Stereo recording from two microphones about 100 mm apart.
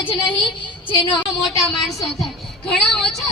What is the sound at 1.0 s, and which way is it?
Speech, 55° left (ahead or behind).